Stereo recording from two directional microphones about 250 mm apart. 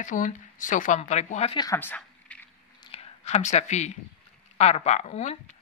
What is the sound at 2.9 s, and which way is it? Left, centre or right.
A woman's voice, left.